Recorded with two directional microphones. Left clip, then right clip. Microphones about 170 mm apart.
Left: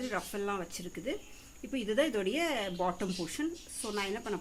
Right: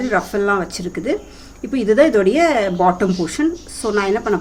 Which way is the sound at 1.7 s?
35° left (ahead or behind).